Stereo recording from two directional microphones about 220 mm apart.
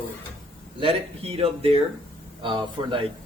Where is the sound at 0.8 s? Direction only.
25° right (ahead or behind).